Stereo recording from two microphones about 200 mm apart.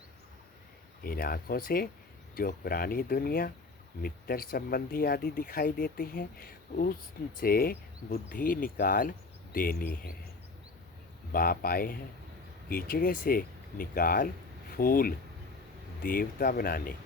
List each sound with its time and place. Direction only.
1.0 s speech: 45° left (ahead or behind)
11.3 s speech: 45° left (ahead or behind)